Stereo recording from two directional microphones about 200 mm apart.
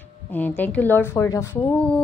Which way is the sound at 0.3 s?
10° left (ahead or behind).